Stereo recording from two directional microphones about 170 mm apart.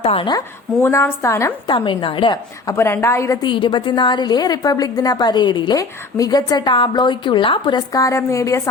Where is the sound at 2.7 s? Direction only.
15° left (ahead or behind).